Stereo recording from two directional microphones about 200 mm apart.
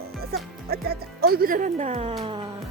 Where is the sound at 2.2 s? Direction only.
25° right (ahead or behind).